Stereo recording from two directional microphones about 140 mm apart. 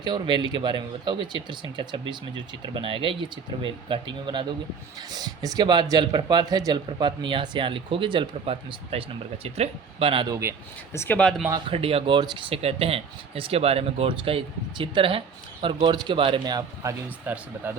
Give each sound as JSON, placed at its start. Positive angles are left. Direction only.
{"t": 0.0, "sound": "speech", "side_deg": -30}
{"t": 10.2, "sound": "speech", "side_deg": -25}
{"t": 10.9, "sound": "speech", "side_deg": 20}
{"t": 11.2, "sound": "speech", "side_deg": 5}
{"t": 11.7, "sound": "speech", "side_deg": -45}
{"t": 17.3, "sound": "speech", "side_deg": -10}